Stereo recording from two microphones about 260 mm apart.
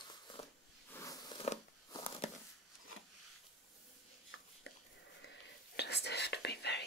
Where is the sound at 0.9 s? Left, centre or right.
Centre.